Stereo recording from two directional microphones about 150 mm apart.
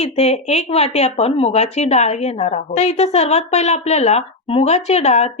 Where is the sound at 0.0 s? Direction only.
45° left (ahead or behind).